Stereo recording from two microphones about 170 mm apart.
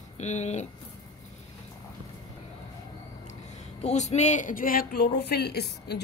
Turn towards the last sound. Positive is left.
turn(degrees=80)